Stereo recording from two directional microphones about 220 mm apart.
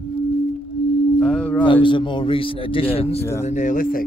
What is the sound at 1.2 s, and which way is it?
Singing bowl, 5° left (ahead or behind).